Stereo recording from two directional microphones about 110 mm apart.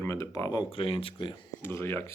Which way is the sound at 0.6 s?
55° left (ahead or behind).